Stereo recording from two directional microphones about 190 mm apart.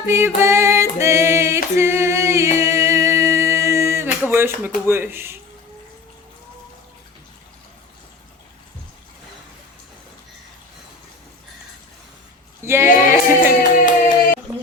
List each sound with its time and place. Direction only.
0.0 s singing: 15° right (ahead or behind)
12.6 s speech: 15° right (ahead or behind)
13.4 s music: 45° left (ahead or behind)